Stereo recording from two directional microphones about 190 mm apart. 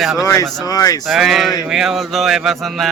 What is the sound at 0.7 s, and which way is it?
Speech, 20° left (ahead or behind).